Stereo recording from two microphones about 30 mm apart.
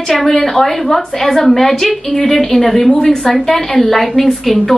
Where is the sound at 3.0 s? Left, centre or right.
Left.